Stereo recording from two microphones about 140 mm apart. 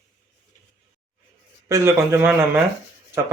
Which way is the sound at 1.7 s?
20° right (ahead or behind).